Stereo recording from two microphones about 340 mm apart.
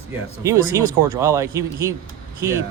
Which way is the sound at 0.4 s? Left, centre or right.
Centre.